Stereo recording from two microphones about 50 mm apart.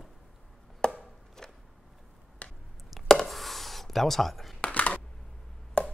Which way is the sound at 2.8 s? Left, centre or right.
Centre.